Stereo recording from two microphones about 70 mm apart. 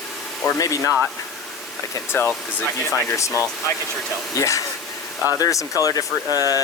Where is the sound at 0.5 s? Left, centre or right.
Left.